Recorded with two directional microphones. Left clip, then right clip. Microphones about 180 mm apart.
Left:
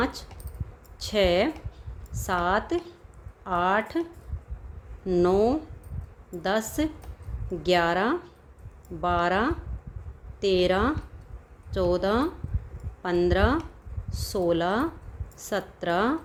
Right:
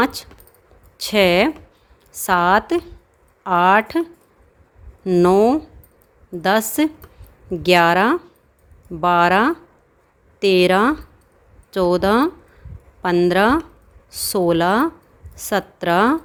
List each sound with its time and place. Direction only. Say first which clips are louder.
0.0 s a woman's voice: right 9 dB; 50° right (ahead or behind)
5.0 s a woman's voice: right 8 dB; 50° right (ahead or behind)